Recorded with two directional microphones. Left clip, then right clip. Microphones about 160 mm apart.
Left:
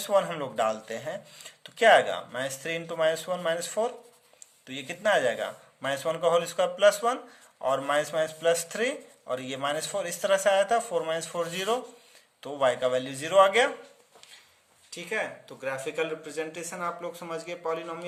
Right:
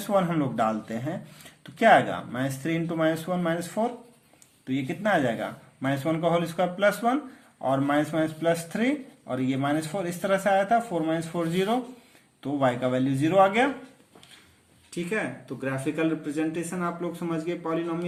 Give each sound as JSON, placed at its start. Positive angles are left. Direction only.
{"t": 0.0, "sound": "a man's voice", "side_deg": 25}
{"t": 14.8, "sound": "speech", "side_deg": 10}